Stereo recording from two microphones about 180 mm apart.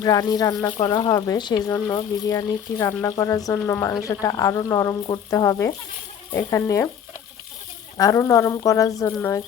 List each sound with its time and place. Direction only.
0.0 s speech: 20° left (ahead or behind)
7.9 s speech: 20° left (ahead or behind)